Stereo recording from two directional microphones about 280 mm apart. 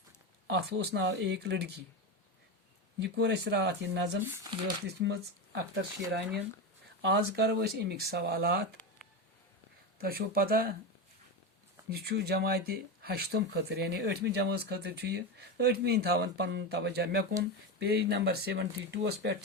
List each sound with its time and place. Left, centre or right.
0.4 s speech: right
3.0 s speech: right
4.9 s speech: right
10.0 s speech: right
11.9 s speech: right